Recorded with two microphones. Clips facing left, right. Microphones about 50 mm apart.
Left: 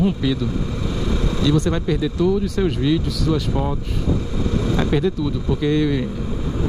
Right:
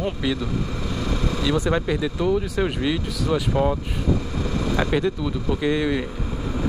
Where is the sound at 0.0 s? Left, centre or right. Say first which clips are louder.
Left 5 dB; centre.